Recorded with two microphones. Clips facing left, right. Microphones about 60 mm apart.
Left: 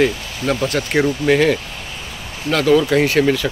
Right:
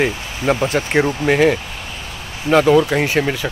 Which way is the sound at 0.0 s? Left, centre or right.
Right.